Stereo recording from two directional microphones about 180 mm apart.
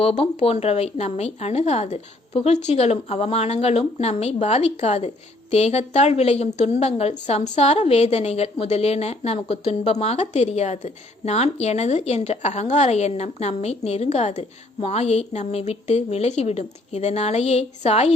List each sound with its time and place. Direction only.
0.0 s speech: 35° left (ahead or behind)